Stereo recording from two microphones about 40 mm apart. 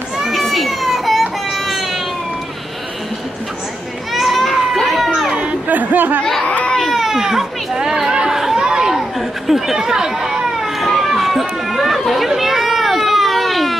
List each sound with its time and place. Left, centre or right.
0.2 s baby cry: centre
4.1 s children playing: centre
4.8 s a sound: centre
5.3 s chatter: right
5.7 s chatter: right
6.4 s baby cry: left
6.8 s baby cry: centre
7.1 s chatter: centre
8.5 s chatter: right
8.8 s a sound: centre
9.8 s speech: centre
11.1 s run: centre
12.1 s a sound: centre